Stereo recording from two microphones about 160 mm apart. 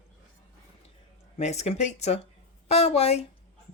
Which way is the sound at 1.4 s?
45° left (ahead or behind).